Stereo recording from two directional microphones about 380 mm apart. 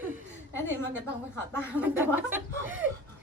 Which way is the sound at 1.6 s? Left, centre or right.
Centre.